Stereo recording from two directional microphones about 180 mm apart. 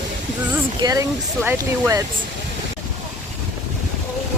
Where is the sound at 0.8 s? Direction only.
20° right (ahead or behind).